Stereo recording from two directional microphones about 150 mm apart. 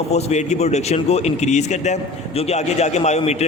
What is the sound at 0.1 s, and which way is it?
Speech, 45° left (ahead or behind).